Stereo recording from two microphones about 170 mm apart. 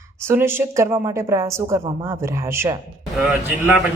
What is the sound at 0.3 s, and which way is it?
A woman's voice, 15° right (ahead or behind).